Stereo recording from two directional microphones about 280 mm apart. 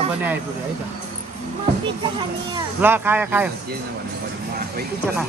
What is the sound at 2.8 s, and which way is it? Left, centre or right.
Speech, centre.